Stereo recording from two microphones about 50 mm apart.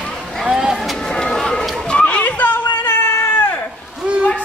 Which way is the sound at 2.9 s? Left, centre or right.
Left.